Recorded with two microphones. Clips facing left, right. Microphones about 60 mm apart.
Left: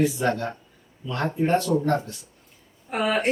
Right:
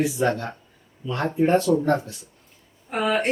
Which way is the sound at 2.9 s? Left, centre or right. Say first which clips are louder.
Right 1 dB; centre.